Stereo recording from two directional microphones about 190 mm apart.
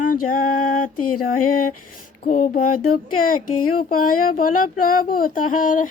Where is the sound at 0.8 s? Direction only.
45° left (ahead or behind).